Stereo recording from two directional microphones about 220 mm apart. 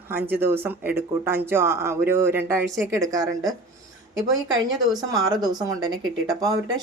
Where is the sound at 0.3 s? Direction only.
10° right (ahead or behind).